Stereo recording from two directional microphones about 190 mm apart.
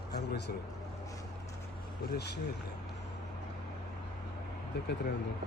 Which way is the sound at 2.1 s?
60° left (ahead or behind).